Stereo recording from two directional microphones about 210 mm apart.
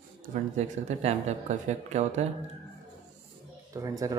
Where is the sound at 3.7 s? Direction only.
15° right (ahead or behind).